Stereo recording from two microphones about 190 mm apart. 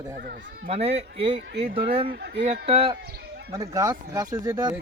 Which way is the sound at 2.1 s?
60° right (ahead or behind).